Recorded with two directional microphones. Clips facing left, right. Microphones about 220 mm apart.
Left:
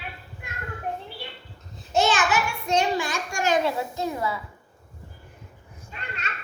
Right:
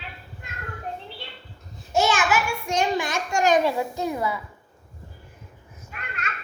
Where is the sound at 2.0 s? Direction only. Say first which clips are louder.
Even; 10° right (ahead or behind).